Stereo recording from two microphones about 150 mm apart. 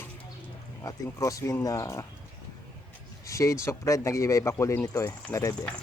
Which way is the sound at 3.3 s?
20° left (ahead or behind).